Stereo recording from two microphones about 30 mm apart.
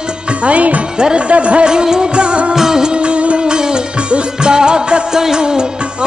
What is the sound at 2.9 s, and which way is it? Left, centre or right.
Music, right.